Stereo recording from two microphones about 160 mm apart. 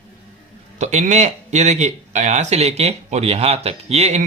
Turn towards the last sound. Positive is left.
turn(degrees=-40)  # may be behind; listen again after turning